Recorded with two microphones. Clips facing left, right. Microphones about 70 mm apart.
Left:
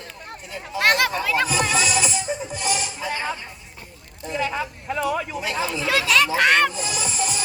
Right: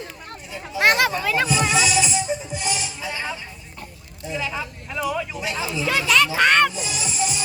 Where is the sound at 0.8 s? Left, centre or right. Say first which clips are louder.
Right 1 dB; centre.